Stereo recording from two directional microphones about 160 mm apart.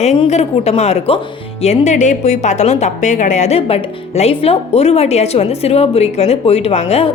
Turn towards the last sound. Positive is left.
turn(degrees=40)  # may be behind; listen again after turning